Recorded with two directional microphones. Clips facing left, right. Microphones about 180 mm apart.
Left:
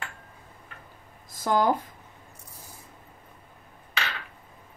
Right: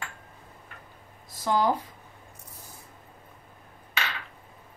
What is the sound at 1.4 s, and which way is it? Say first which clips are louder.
Speech: left 1 dB; 45° left (ahead or behind).